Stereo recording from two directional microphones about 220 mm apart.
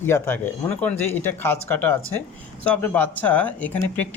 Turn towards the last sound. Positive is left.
turn(degrees=5)  # may be behind; listen again after turning